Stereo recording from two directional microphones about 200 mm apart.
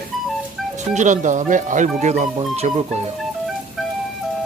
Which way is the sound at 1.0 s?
40° right (ahead or behind).